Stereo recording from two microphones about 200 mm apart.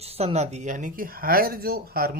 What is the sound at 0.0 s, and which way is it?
Speech, 30° right (ahead or behind).